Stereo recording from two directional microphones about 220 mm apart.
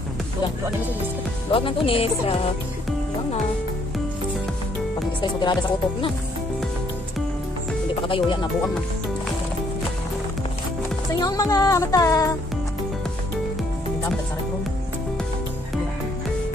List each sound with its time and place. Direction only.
1.5 s speech: 25° left (ahead or behind)
5.2 s speech: 20° left (ahead or behind)
8.1 s speech: 25° left (ahead or behind)
11.1 s music: 15° left (ahead or behind)